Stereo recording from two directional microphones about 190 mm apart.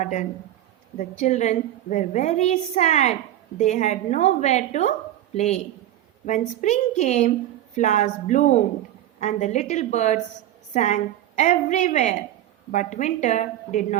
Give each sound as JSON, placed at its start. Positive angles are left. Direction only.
{"t": 0.0, "sound": "a woman's voice", "side_deg": 40}